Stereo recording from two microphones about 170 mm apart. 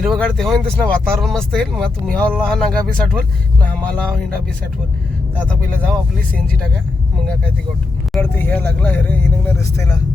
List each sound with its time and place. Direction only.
0.0 s speech: centre (ahead or behind)
5.4 s speech: 10° left (ahead or behind)
8.2 s speech: 10° left (ahead or behind)